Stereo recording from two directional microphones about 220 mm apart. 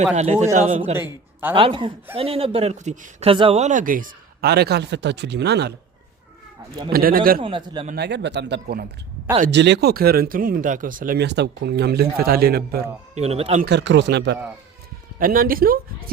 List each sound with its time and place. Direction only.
0.1 s speech: 30° right (ahead or behind); by 5.7 s 50° right (ahead or behind)
6.9 s speech: 40° right (ahead or behind)
7.4 s speech: 20° right (ahead or behind)
7.9 s speech: 50° right (ahead or behind)
13.1 s speech: 30° right (ahead or behind)
13.7 s speech: 50° right (ahead or behind)
15.2 s speech: 40° right (ahead or behind)